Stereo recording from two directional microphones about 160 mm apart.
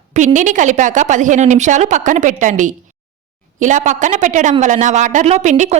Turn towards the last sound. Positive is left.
turn(degrees=-50)  # may be behind; listen again after turning